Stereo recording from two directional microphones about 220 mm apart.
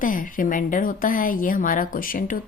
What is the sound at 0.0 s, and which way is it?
A woman's voice, 40° left (ahead or behind).